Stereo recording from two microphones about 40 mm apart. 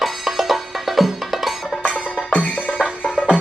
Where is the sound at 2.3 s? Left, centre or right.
Left.